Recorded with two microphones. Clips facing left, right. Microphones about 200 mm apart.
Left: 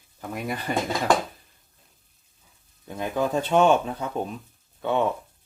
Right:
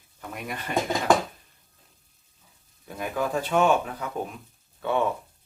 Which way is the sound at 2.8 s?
25° left (ahead or behind).